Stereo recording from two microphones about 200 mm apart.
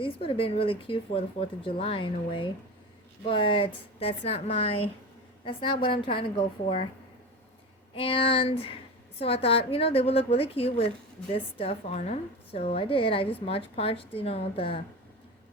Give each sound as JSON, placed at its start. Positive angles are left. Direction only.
{"t": 0.0, "sound": "speech", "side_deg": 30}
{"t": 7.9, "sound": "speech", "side_deg": 25}